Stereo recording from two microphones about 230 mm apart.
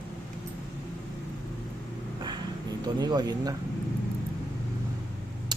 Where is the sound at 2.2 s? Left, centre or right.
Centre.